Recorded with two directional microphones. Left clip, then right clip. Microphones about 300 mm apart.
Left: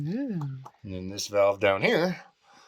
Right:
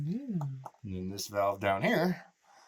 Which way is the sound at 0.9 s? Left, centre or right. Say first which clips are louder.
Left 7 dB; centre.